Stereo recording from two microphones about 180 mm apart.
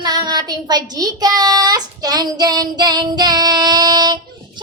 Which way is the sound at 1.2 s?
20° right (ahead or behind).